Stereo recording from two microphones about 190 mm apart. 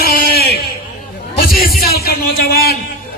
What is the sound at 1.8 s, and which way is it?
Speech, 55° left (ahead or behind).